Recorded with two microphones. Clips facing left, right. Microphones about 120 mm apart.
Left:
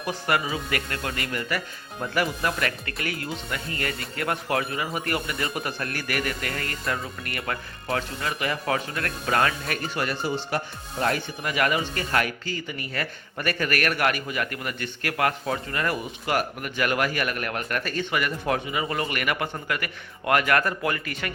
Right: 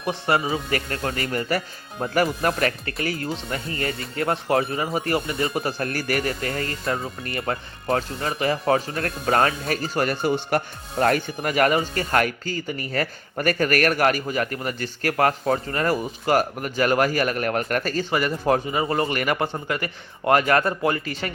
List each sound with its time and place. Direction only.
0.0 s speech: 25° right (ahead or behind)